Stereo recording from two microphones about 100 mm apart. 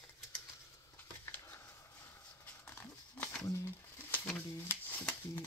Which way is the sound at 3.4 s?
30° left (ahead or behind).